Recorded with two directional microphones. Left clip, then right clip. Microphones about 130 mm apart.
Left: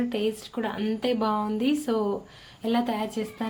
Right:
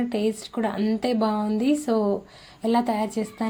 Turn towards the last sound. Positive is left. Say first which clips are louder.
# right 3 dB
turn(degrees=-25)  # may be behind; listen again after turning